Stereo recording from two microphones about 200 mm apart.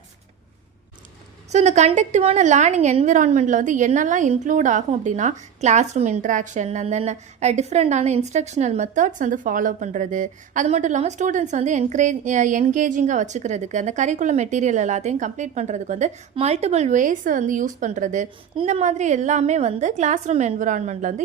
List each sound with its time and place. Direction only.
1.5 s a woman's voice: 35° right (ahead or behind)